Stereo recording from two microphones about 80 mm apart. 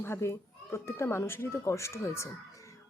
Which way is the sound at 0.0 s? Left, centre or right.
Left.